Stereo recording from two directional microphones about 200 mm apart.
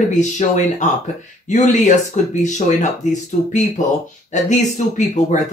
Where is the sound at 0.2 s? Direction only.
35° left (ahead or behind).